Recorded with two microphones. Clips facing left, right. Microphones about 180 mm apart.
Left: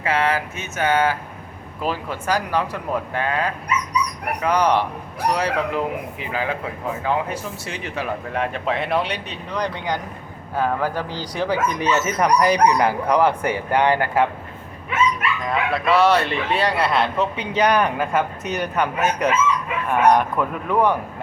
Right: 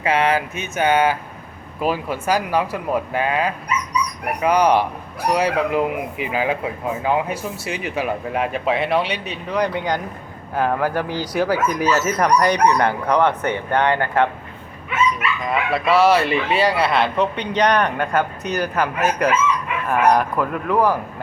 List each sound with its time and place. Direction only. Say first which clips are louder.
0.0 s speech: right 3 dB; 20° right (ahead or behind); by 14.3 s 10° left (ahead or behind)
15.4 s speech: right 1 dB; 5° right (ahead or behind)